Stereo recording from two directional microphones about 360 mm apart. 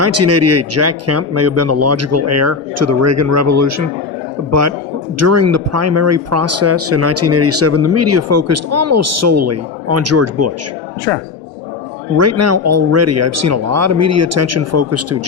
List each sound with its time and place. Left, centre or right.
0.0 s speech: right
5.2 s speech: right
12.1 s speech: right